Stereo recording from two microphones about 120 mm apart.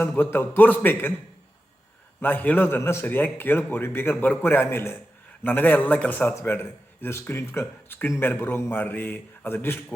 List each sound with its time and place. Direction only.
0.0 s a man's voice: 15° left (ahead or behind)
2.2 s a man's voice: 15° left (ahead or behind)